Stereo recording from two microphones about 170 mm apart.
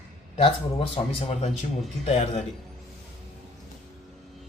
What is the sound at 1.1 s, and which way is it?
Speech, 35° left (ahead or behind).